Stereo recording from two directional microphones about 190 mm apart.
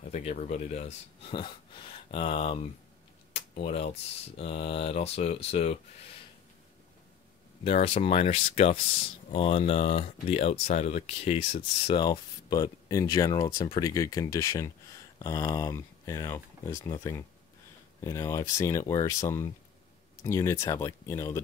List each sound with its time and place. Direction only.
0.1 s speech: 35° left (ahead or behind)
7.6 s speech: 30° left (ahead or behind); by 21.4 s 15° left (ahead or behind)